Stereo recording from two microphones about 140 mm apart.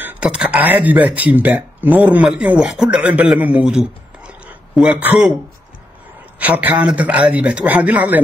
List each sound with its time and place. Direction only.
0.0 s speech: 10° right (ahead or behind)
6.4 s a man's voice: 10° right (ahead or behind)